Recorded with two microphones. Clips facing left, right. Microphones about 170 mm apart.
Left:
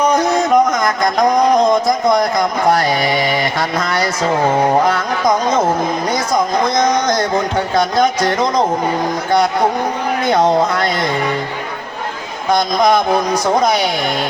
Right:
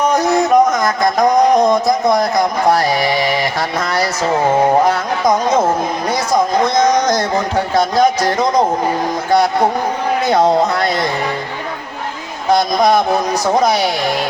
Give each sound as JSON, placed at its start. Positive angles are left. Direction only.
{"t": 0.2, "sound": "music", "side_deg": -25}
{"t": 1.9, "sound": "speech", "side_deg": -25}
{"t": 4.9, "sound": "music", "side_deg": -25}
{"t": 6.3, "sound": "a sound", "side_deg": -25}
{"t": 7.8, "sound": "speech", "side_deg": -25}
{"t": 10.2, "sound": "speech", "side_deg": -25}
{"t": 13.6, "sound": "speech", "side_deg": -25}